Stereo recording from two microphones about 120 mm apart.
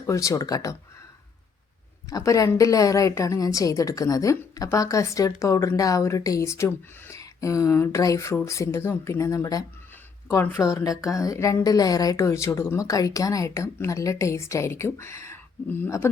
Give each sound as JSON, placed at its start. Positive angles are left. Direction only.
{"t": 0.1, "sound": "a woman's voice", "side_deg": 25}
{"t": 2.0, "sound": "a woman's voice", "side_deg": 30}